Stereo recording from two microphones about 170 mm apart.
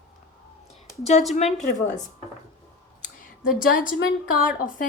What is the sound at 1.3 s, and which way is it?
Speech, 45° left (ahead or behind).